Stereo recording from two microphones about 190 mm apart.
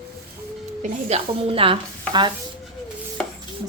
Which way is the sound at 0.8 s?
35° right (ahead or behind).